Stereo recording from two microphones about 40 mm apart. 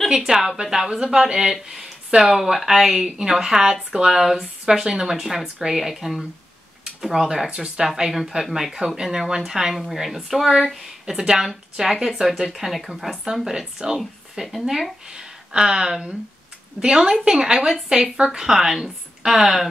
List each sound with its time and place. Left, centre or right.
0.1 s speech: centre
7.9 s speech: centre